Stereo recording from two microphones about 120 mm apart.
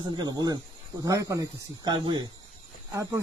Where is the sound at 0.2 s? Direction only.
35° right (ahead or behind).